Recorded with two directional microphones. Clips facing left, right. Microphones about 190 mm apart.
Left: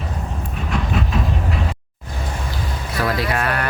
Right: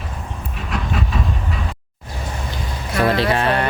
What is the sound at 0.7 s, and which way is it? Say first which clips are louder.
Train: left 2 dB; centre (ahead or behind).